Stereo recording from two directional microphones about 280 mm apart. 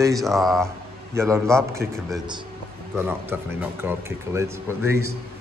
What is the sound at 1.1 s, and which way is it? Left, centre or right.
Speech, centre.